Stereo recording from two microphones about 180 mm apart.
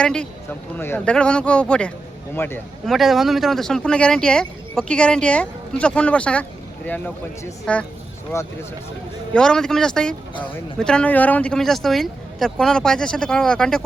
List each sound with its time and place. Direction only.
0.0 s speech: 5° left (ahead or behind)
2.8 s speech: centre (ahead or behind); by 8.5 s 15° left (ahead or behind)
9.3 s speech: 5° left (ahead or behind)